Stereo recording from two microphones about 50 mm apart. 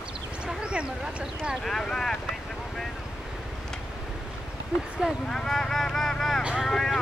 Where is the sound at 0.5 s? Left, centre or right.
Centre.